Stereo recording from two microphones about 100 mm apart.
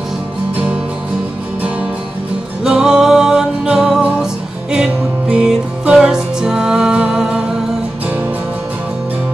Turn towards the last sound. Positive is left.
turn(degrees=-5)  # may be behind; listen again after turning